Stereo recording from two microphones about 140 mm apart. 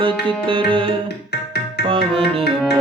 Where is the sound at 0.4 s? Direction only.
35° right (ahead or behind).